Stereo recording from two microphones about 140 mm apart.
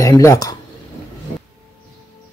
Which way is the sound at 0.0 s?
25° left (ahead or behind).